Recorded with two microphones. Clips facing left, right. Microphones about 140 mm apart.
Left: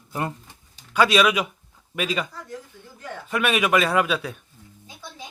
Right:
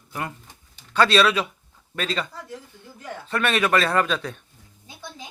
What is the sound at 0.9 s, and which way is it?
A man's voice, 10° left (ahead or behind).